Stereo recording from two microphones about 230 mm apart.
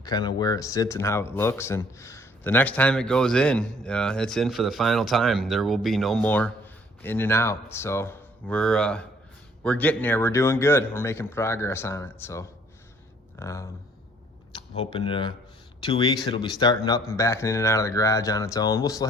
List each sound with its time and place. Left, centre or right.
0.0 s speech: centre